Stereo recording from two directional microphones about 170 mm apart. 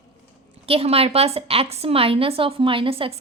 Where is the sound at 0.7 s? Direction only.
35° right (ahead or behind).